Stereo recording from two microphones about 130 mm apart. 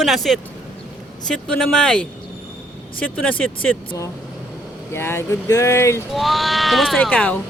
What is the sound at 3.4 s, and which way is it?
Speech, 10° left (ahead or behind).